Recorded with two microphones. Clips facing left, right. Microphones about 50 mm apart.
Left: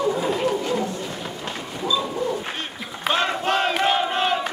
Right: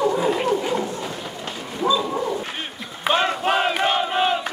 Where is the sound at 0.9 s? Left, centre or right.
Centre.